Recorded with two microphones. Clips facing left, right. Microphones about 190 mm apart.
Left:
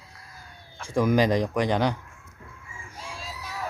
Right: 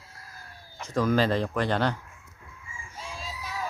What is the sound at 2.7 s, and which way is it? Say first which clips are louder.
Chicken: right 1 dB; 65° left (ahead or behind).